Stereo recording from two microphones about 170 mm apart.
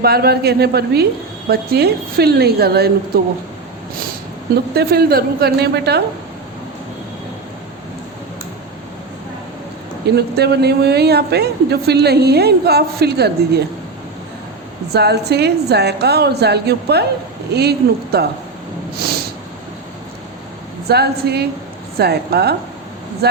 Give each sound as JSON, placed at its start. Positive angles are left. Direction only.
{"t": 0.0, "sound": "a woman's voice", "side_deg": -65}
{"t": 4.7, "sound": "a woman's voice", "side_deg": -70}
{"t": 10.2, "sound": "a woman's voice", "side_deg": -75}
{"t": 14.9, "sound": "a woman's voice", "side_deg": -75}
{"t": 20.8, "sound": "a woman's voice", "side_deg": -70}